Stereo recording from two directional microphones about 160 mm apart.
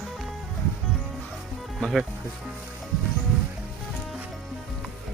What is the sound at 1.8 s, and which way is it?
Speech, centre (ahead or behind).